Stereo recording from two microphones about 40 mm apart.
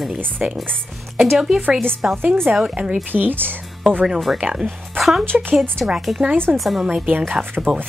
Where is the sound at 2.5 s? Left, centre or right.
Right.